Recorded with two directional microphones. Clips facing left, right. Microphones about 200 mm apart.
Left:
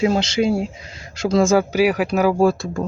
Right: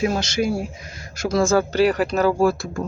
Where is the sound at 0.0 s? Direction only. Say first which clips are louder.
Left 4 dB; 25° left (ahead or behind).